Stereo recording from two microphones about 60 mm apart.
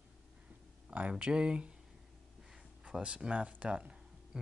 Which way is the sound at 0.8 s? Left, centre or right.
Right.